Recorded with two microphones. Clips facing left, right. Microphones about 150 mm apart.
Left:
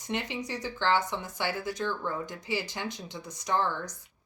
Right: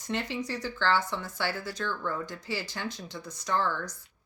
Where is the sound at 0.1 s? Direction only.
20° left (ahead or behind).